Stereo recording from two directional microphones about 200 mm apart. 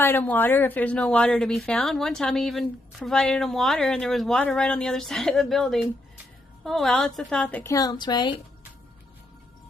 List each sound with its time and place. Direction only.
0.0 s a woman's voice: 10° left (ahead or behind)